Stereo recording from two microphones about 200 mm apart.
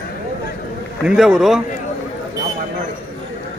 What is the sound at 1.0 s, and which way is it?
Speech, 5° right (ahead or behind).